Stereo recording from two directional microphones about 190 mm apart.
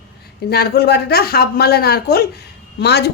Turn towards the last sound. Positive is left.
turn(degrees=60)  # may be behind; listen again after turning